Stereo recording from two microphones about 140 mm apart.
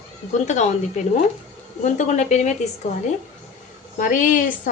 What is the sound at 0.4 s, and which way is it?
A woman's voice, 55° left (ahead or behind).